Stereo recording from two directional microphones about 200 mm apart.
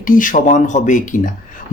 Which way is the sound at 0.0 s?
40° left (ahead or behind).